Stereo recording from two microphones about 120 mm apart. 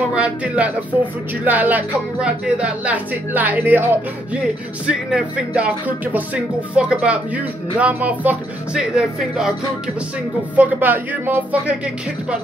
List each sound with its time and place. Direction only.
0.1 s speech: 10° right (ahead or behind)
4.8 s speech: 10° right (ahead or behind)
10.5 s speech: 15° right (ahead or behind)